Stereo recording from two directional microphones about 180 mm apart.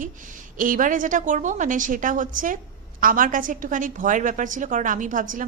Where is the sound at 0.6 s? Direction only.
50° right (ahead or behind).